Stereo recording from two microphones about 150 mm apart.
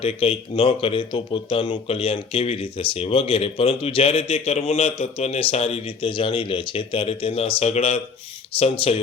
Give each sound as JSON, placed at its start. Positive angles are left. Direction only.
{"t": 0.0, "sound": "speech", "side_deg": 40}